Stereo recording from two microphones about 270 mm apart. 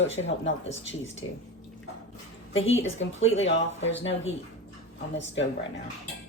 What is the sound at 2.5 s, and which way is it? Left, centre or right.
Speech, left.